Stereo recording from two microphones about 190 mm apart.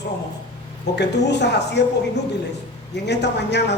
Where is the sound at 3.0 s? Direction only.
65° left (ahead or behind).